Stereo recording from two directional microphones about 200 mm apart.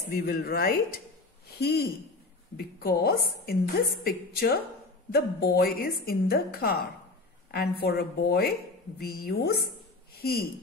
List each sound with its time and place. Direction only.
0.1 s a woman's voice: 50° left (ahead or behind)